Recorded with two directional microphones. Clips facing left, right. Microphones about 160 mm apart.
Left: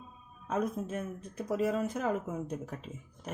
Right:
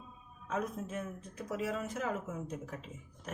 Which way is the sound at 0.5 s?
40° left (ahead or behind).